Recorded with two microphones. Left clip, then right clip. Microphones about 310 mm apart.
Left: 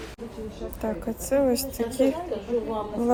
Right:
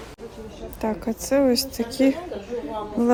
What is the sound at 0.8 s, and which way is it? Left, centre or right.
A woman's voice, right.